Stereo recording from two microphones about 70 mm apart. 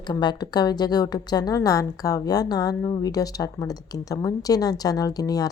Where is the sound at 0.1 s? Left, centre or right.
Left.